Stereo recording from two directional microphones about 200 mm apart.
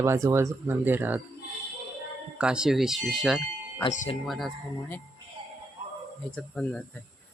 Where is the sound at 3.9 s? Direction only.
40° left (ahead or behind).